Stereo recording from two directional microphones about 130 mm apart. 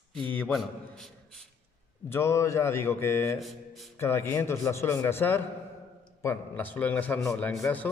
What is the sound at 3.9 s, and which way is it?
A man's voice, 20° left (ahead or behind).